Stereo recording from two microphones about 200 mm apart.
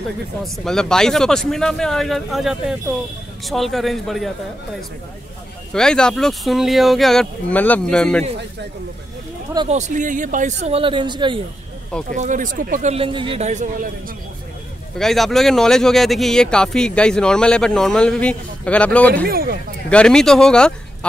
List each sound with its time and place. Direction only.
0.7 s speech: 5° left (ahead or behind)
5.7 s speech: 5° left (ahead or behind)
9.7 s speech: 35° right (ahead or behind)
12.1 s speech: 40° right (ahead or behind)
15.0 s speech: centre (ahead or behind)
19.2 s speech: 50° right (ahead or behind)
19.9 s speech: 5° left (ahead or behind)